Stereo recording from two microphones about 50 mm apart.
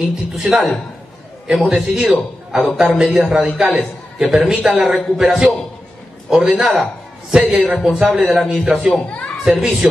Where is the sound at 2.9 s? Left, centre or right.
Centre.